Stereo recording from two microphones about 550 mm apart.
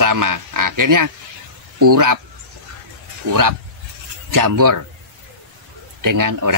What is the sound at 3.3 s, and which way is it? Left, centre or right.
Speech, right.